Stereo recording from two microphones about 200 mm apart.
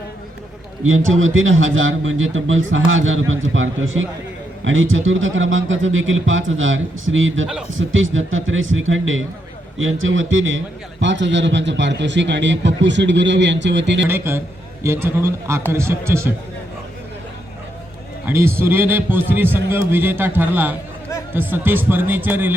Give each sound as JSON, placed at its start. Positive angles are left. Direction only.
{"t": 0.9, "sound": "a man's voice", "side_deg": -80}
{"t": 14.1, "sound": "a man's voice", "side_deg": -10}
{"t": 18.3, "sound": "a man's voice", "side_deg": -10}